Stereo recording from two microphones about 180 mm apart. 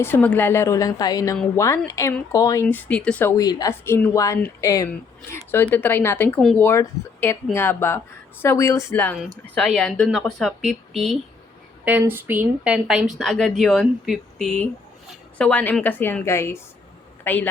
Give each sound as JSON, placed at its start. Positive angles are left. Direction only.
{"t": 0.0, "sound": "speech", "side_deg": 10}
{"t": 11.9, "sound": "speech", "side_deg": -10}